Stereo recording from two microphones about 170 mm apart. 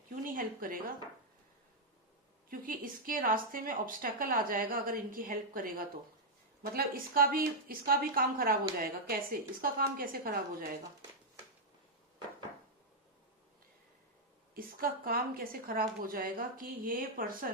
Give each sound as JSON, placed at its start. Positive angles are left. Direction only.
{"t": 0.1, "sound": "a sound", "side_deg": -55}
{"t": 2.5, "sound": "a woman's voice", "side_deg": -55}
{"t": 14.5, "sound": "a woman's voice", "side_deg": -60}